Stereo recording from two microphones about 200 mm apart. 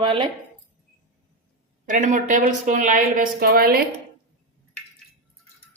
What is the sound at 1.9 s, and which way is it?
A woman's voice, 40° right (ahead or behind).